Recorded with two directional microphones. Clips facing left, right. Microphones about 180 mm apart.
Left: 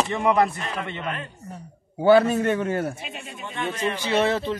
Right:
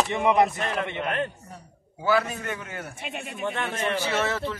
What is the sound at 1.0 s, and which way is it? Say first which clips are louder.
Speech: right 4 dB; 60° right (ahead or behind).